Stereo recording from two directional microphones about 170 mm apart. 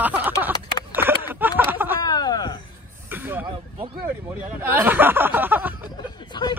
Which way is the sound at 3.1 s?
10° right (ahead or behind).